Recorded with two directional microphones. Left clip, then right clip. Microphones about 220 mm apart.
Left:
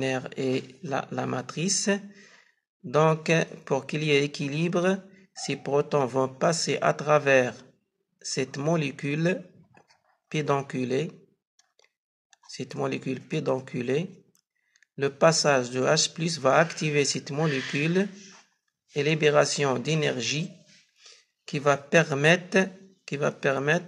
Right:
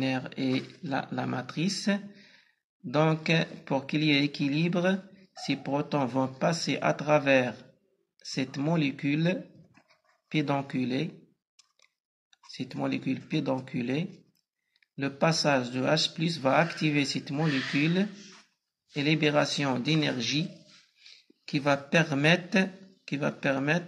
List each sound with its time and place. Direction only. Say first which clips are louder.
0.0 s speech: left 3 dB; 50° left (ahead or behind)
12.5 s speech: left 2 dB; 50° left (ahead or behind)
21.5 s speech: left 4 dB; 50° left (ahead or behind)